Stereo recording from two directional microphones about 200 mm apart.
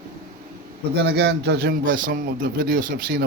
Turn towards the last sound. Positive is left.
turn(degrees=-45)  # may be behind; listen again after turning